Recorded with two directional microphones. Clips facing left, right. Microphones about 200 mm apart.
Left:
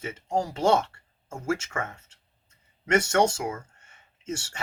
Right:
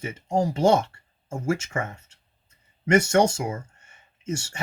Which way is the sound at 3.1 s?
15° right (ahead or behind).